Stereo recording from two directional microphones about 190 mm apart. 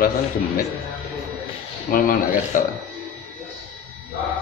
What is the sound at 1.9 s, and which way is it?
Speech, 50° left (ahead or behind).